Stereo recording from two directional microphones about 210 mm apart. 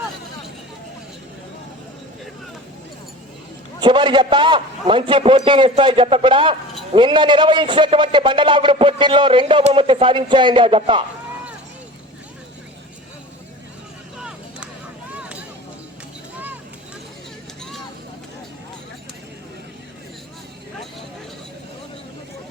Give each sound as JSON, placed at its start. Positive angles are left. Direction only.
{"t": 3.8, "sound": "a man's voice", "side_deg": -20}
{"t": 14.2, "sound": "vehicle", "side_deg": -5}